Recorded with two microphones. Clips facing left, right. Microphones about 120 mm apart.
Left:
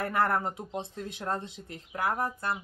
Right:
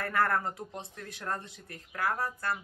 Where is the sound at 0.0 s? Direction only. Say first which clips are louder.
Left 2 dB; 20° left (ahead or behind).